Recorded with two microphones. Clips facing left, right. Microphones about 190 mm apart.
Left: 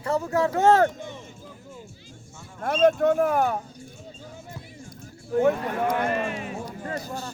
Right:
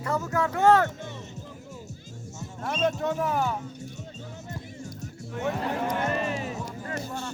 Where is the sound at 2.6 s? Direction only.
65° left (ahead or behind).